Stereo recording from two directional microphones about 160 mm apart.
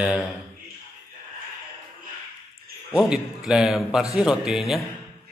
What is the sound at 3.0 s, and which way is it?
A man's voice, 5° right (ahead or behind).